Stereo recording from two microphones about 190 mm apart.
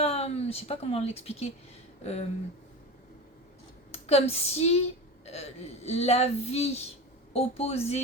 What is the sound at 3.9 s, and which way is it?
A woman's voice, 35° left (ahead or behind).